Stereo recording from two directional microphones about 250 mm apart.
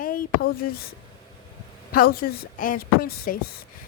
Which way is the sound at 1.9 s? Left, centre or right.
Left.